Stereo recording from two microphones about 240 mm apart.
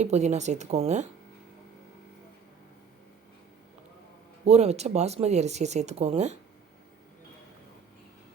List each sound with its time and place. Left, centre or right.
0.0 s speech: right
4.4 s speech: right